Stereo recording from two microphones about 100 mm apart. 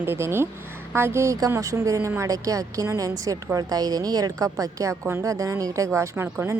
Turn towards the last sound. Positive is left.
turn(degrees=-20)  # may be behind; listen again after turning